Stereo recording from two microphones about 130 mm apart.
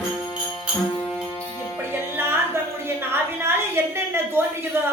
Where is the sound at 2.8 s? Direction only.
15° right (ahead or behind).